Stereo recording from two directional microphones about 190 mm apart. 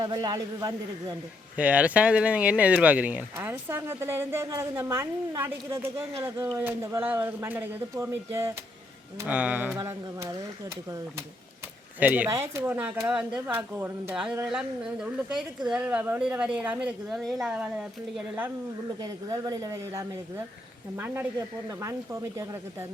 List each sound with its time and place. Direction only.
0.0 s speech: 20° right (ahead or behind)
1.5 s speech: 5° right (ahead or behind)
11.9 s speech: 10° right (ahead or behind)
18.9 s speech: 20° right (ahead or behind)